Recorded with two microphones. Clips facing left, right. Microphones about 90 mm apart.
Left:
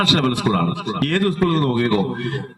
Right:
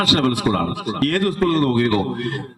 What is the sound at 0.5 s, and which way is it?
Speech, 30° right (ahead or behind).